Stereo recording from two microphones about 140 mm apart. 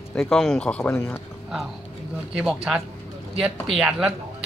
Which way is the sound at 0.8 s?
15° left (ahead or behind).